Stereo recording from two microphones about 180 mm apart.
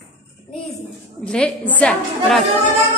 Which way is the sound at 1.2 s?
5° left (ahead or behind).